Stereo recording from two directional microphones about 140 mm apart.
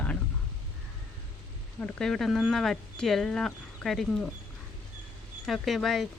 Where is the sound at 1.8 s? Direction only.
5° left (ahead or behind).